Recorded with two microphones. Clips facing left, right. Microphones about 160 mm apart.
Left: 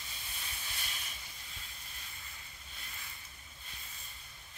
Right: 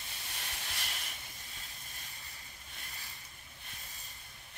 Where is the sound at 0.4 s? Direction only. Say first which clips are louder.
Right 3 dB; 75° right (ahead or behind).